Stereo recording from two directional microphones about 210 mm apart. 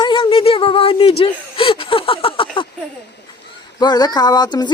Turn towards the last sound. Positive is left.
turn(degrees=20)  # may be behind; listen again after turning